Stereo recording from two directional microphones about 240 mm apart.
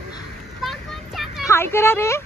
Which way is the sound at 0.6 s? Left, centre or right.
Centre.